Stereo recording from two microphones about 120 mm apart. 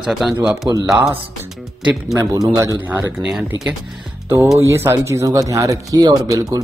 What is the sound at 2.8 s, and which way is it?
Speech, 15° right (ahead or behind).